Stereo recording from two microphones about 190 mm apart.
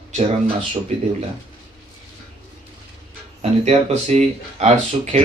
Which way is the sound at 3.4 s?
35° right (ahead or behind).